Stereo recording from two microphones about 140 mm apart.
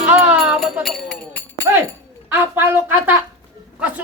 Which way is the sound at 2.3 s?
15° right (ahead or behind).